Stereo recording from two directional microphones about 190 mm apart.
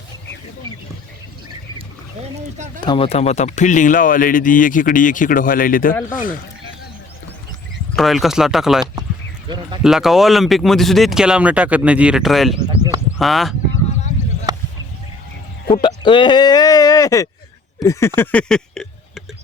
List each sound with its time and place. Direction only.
2.8 s speech: 25° left (ahead or behind); by 6.3 s 45° left (ahead or behind)
7.9 s speech: centre (ahead or behind)
9.5 s speech: 25° right (ahead or behind)
9.8 s speech: centre (ahead or behind)
14.5 s a sound: 20° right (ahead or behind)
15.7 s speech: 25° left (ahead or behind); by 19.2 s 5° left (ahead or behind)